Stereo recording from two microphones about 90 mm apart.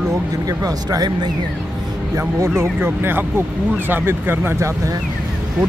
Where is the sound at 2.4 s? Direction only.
30° right (ahead or behind).